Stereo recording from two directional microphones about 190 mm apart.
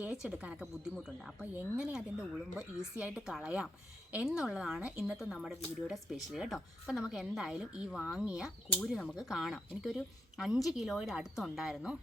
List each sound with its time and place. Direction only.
0.0 s speech: 5° right (ahead or behind)